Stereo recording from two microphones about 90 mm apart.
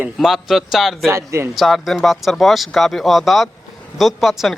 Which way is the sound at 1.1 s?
30° right (ahead or behind).